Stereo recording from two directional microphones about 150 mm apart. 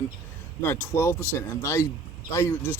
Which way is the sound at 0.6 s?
15° left (ahead or behind).